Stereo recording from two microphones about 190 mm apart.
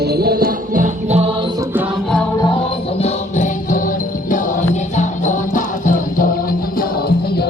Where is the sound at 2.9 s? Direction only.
35° left (ahead or behind).